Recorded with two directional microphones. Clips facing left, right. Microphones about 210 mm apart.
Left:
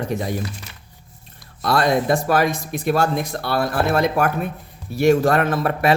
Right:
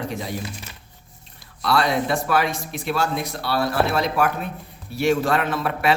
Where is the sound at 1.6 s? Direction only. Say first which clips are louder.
Left 3 dB; 45° left (ahead or behind).